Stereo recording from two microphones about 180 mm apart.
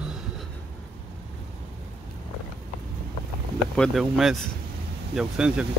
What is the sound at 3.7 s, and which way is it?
Speech, centre (ahead or behind).